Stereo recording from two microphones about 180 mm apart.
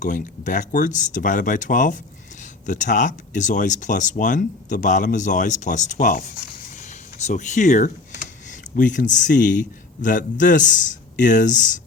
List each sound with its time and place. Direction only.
0.0 s speech: 45° left (ahead or behind)